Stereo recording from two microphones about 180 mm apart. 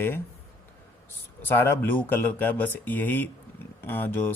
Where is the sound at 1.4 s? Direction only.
10° left (ahead or behind).